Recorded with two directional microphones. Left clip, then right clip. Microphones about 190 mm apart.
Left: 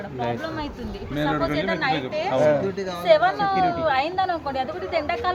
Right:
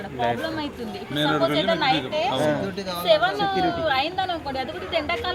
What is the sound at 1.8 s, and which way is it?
A woman's voice, centre (ahead or behind).